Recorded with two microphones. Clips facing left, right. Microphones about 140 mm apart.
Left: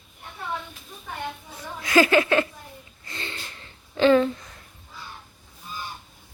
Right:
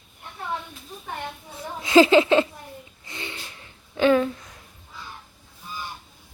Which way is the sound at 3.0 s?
15° right (ahead or behind).